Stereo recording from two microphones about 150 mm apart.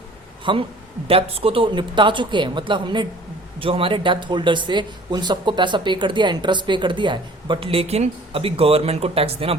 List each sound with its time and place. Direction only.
0.5 s speech: 35° right (ahead or behind)